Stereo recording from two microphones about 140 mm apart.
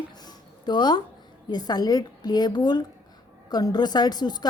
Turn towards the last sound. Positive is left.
turn(degrees=30)  # may be behind; listen again after turning